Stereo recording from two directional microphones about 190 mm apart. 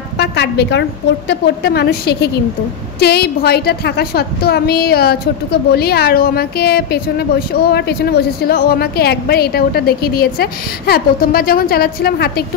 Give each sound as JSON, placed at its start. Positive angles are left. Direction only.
{"t": 0.2, "sound": "a woman's voice", "side_deg": 65}